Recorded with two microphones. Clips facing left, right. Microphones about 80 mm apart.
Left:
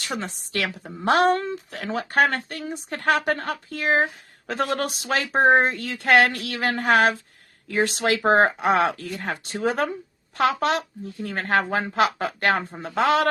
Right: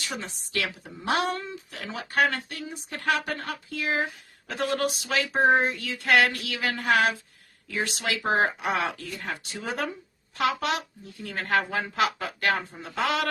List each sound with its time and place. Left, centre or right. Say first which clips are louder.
0.0 s speech: left 5 dB; left